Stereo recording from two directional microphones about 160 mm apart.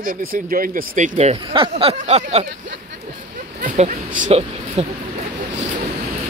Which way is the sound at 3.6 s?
50° right (ahead or behind).